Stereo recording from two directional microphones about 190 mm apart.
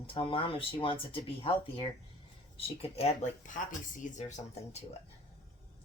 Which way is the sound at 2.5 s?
30° left (ahead or behind).